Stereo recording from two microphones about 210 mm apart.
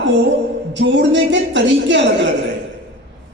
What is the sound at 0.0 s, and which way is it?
A woman's voice, 60° right (ahead or behind).